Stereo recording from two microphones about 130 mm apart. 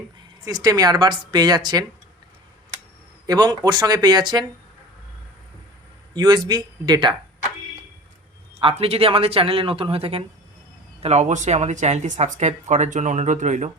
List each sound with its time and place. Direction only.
0.4 s a woman's voice: 30° right (ahead or behind)
3.2 s a woman's voice: 30° right (ahead or behind)
6.1 s a woman's voice: 30° right (ahead or behind)
8.6 s speech: 50° right (ahead or behind)
11.0 s speech: 60° right (ahead or behind)